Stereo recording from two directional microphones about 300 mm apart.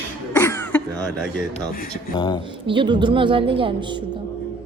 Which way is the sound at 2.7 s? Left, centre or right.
Centre.